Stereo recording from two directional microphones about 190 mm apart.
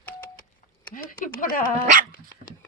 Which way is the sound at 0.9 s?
45° left (ahead or behind).